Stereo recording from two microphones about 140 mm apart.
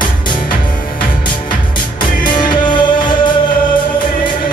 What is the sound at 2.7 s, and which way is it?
Music, 35° left (ahead or behind).